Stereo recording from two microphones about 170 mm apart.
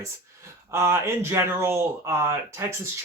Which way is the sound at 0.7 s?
15° right (ahead or behind).